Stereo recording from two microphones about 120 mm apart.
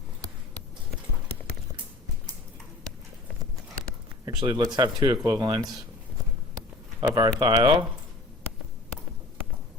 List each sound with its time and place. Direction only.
4.3 s speech: 35° right (ahead or behind)
7.1 s speech: 35° right (ahead or behind)